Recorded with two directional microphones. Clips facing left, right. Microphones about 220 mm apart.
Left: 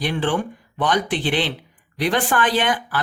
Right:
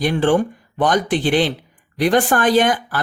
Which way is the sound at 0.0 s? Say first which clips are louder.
Right 6 dB; 45° right (ahead or behind).